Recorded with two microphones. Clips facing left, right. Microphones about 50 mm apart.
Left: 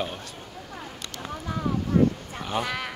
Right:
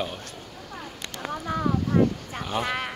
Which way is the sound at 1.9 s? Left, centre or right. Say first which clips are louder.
Left 1 dB; right.